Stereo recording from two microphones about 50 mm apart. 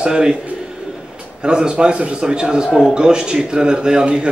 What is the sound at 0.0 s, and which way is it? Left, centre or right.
Speech, centre.